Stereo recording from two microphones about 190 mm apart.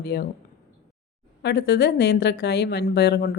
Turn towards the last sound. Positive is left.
turn(degrees=55)  # may be behind; listen again after turning